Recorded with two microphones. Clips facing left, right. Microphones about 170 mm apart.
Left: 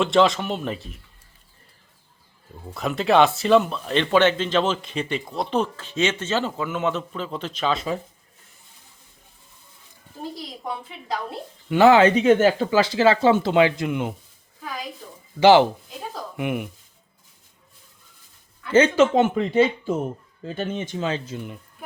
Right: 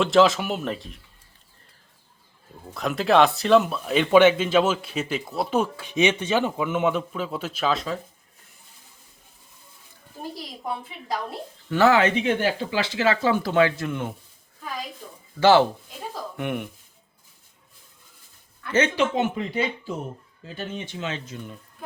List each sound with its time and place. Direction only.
0.0 s speech: centre (ahead or behind)
2.7 s speech: centre (ahead or behind)
11.7 s speech: 20° left (ahead or behind)
12.0 s speech: 40° left (ahead or behind); by 14.1 s 15° left (ahead or behind)
15.4 s speech: 15° left (ahead or behind)
18.9 s speech: 50° left (ahead or behind)
20.6 s speech: 45° left (ahead or behind)